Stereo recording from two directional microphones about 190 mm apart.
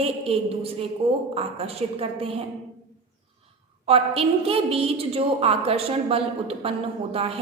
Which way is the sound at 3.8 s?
30° right (ahead or behind).